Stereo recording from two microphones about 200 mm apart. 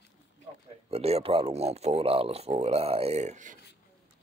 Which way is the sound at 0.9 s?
30° right (ahead or behind).